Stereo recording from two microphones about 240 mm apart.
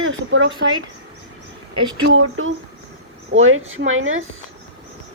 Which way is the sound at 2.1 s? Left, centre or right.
Right.